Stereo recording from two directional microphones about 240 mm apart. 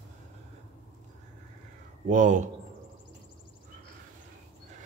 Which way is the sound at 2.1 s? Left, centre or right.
Right.